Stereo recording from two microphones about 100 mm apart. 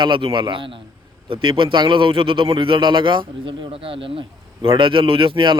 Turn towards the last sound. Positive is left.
turn(degrees=-55)  # may be behind; listen again after turning